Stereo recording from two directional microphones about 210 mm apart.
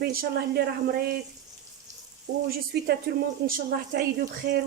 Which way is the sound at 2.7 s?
50° right (ahead or behind).